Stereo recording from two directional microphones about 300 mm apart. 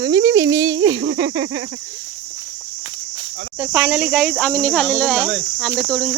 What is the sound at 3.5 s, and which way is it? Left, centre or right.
Speech, centre.